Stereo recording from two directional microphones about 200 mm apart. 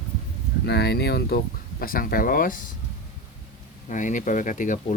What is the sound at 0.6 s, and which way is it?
Speech, 55° left (ahead or behind).